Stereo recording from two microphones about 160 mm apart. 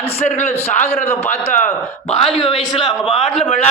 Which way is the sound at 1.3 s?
45° left (ahead or behind).